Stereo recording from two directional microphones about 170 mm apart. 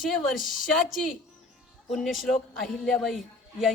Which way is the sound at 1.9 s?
Centre (ahead or behind).